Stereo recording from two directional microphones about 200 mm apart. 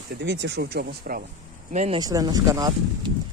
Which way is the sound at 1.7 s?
35° right (ahead or behind).